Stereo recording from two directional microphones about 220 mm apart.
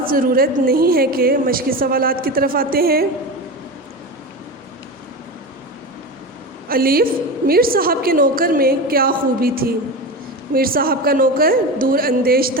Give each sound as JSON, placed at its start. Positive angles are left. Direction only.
{"t": 0.0, "sound": "a woman's voice", "side_deg": -40}
{"t": 6.7, "sound": "a woman's voice", "side_deg": -40}